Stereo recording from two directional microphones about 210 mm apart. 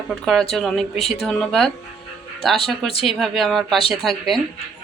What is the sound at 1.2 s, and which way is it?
Speech, centre (ahead or behind).